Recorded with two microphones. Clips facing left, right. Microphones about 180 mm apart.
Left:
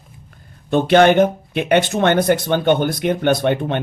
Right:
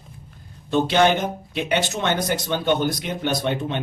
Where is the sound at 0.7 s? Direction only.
55° left (ahead or behind).